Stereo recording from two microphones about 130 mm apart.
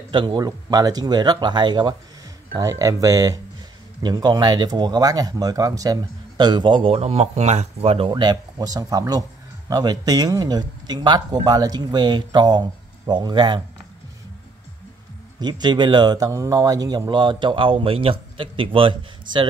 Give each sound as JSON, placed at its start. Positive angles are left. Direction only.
{"t": 0.1, "sound": "speech", "side_deg": -40}
{"t": 8.1, "sound": "speech", "side_deg": -35}
{"t": 15.4, "sound": "speech", "side_deg": -35}